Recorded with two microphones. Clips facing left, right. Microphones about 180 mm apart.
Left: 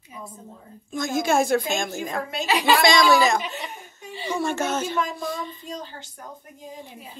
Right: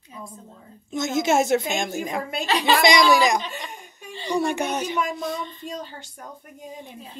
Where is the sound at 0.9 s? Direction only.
20° right (ahead or behind).